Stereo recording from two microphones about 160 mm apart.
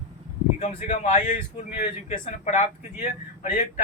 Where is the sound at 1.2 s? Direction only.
55° left (ahead or behind).